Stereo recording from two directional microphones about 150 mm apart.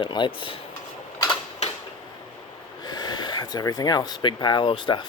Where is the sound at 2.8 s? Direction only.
30° left (ahead or behind).